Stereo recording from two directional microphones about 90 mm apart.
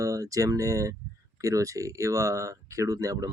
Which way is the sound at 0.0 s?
40° right (ahead or behind).